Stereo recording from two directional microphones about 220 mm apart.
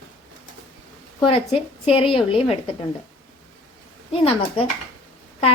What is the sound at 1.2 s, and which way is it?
Speech, 25° left (ahead or behind).